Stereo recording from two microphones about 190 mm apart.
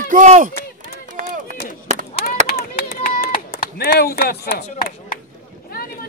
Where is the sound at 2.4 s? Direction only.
55° left (ahead or behind).